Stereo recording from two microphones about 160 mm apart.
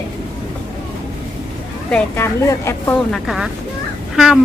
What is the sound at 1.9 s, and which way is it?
Speech, 10° left (ahead or behind).